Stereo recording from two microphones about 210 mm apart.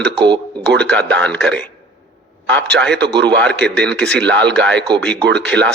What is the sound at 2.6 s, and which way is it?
Speech, 55° right (ahead or behind).